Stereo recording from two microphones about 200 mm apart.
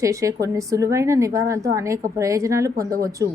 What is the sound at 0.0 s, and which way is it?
A woman's voice, 15° right (ahead or behind).